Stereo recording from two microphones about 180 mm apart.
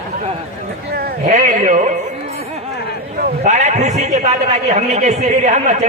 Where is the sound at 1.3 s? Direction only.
40° right (ahead or behind).